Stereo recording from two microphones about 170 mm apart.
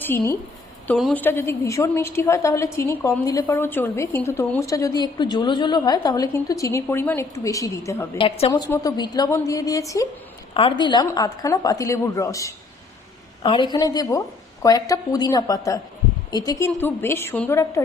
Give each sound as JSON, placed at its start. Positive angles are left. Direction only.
{"t": 0.0, "sound": "a woman's voice", "side_deg": 15}
{"t": 10.5, "sound": "a woman's voice", "side_deg": 30}